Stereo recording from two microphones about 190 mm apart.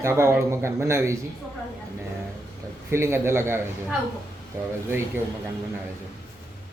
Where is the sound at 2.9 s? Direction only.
15° right (ahead or behind).